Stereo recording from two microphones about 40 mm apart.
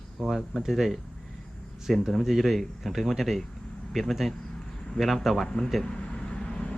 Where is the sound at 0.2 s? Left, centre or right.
Centre.